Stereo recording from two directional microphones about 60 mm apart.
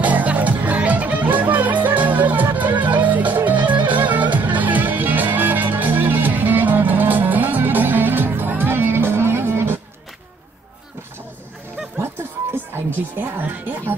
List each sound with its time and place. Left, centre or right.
0.0 s music: right
12.7 s music: right